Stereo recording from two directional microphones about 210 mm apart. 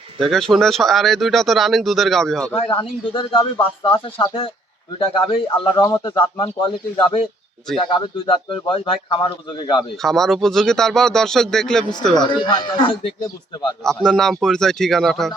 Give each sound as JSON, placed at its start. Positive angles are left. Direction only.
{"t": 0.2, "sound": "speech", "side_deg": 0}
{"t": 2.6, "sound": "a man's voice", "side_deg": 25}
{"t": 10.0, "sound": "speech", "side_deg": 0}
{"t": 12.1, "sound": "a man's voice", "side_deg": 20}
{"t": 13.8, "sound": "speech", "side_deg": 0}